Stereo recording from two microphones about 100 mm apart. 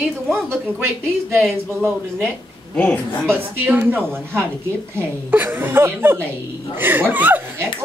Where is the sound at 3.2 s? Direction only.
20° right (ahead or behind).